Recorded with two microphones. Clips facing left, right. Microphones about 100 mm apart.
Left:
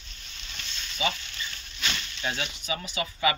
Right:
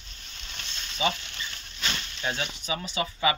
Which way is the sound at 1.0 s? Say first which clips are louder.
Right 2 dB; 30° right (ahead or behind).